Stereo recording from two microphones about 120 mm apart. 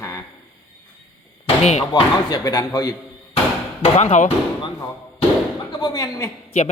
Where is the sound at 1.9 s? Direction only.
35° left (ahead or behind).